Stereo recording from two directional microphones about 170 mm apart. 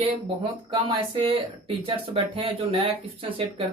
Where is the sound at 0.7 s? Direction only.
30° right (ahead or behind).